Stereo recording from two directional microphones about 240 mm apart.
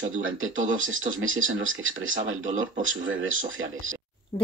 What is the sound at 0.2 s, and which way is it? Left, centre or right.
Speech, right.